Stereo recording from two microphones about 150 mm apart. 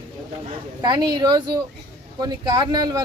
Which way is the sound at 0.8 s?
30° right (ahead or behind).